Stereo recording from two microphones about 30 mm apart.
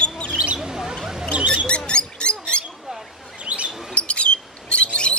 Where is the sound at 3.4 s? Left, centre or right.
Right.